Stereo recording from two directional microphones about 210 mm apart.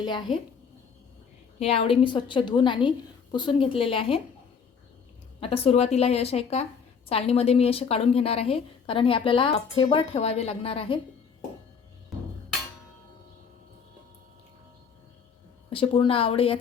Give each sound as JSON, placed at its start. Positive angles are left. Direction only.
{"t": 0.0, "sound": "a woman's voice", "side_deg": 20}
{"t": 1.5, "sound": "a woman's voice", "side_deg": 30}
{"t": 5.4, "sound": "a woman's voice", "side_deg": 30}
{"t": 15.7, "sound": "a woman's voice", "side_deg": 25}